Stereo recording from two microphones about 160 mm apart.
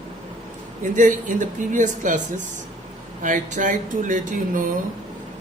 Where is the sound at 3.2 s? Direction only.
55° right (ahead or behind).